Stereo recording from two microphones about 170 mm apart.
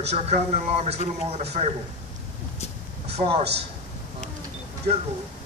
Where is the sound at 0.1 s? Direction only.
40° right (ahead or behind).